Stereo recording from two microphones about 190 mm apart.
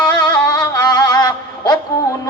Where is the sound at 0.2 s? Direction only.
20° left (ahead or behind).